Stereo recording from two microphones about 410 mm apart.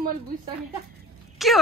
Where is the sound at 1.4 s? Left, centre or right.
Centre.